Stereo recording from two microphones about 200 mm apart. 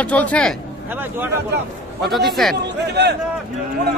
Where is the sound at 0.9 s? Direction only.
10° right (ahead or behind).